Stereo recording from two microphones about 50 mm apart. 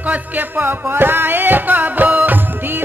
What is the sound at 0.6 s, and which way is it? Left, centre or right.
Music, right.